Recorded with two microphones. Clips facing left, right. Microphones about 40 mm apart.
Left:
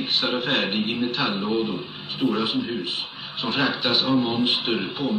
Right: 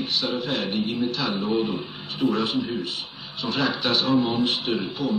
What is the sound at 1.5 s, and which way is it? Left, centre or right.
Speech, centre.